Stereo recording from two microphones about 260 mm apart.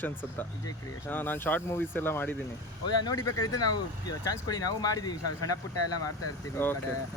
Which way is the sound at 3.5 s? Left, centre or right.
Centre.